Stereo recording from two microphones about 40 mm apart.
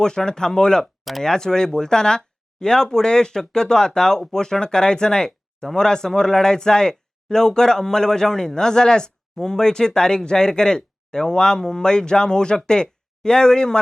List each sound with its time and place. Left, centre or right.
0.0 s speech: centre